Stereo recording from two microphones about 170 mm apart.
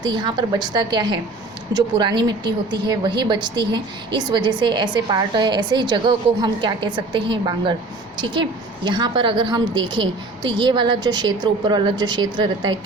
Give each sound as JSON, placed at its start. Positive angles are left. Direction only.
{"t": 0.0, "sound": "a woman's voice", "side_deg": -25}